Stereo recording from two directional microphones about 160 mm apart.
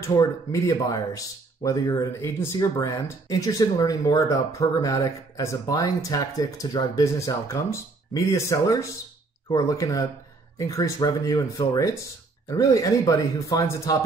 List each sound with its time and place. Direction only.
0.0 s speech: 20° left (ahead or behind)